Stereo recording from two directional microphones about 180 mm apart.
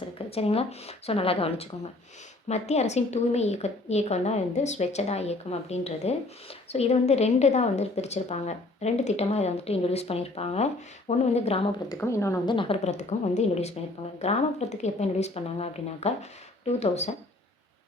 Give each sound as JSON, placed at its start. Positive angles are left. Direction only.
{"t": 0.3, "sound": "a woman's voice", "side_deg": 35}
{"t": 11.9, "sound": "speech", "side_deg": 15}
{"t": 12.5, "sound": "a woman's voice", "side_deg": 35}